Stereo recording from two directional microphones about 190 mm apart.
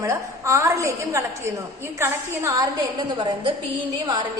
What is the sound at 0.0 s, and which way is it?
A woman's voice, 15° right (ahead or behind).